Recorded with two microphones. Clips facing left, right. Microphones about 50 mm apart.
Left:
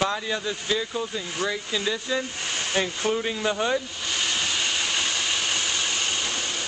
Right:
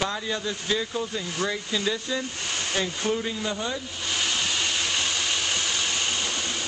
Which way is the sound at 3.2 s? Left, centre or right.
Left.